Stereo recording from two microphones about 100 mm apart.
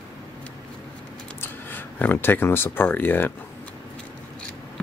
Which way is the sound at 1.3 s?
20° left (ahead or behind).